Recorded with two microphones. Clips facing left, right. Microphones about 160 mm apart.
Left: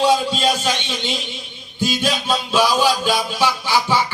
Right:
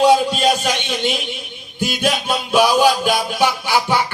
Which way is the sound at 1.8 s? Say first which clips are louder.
Right 1 dB; 15° right (ahead or behind).